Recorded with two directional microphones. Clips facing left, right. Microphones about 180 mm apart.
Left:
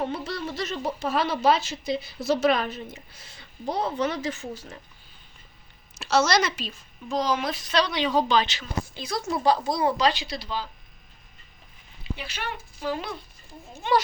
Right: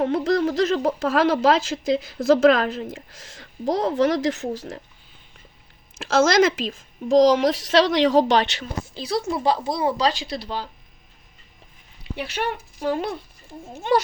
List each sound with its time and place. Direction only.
0.0 s a sound: 90° right
1.0 s a woman's voice: 90° right
6.0 s a woman's voice: 90° right
9.0 s a woman's voice: 30° right (ahead or behind)
10.2 s speech: 55° right (ahead or behind)
12.1 s speech: 60° right (ahead or behind)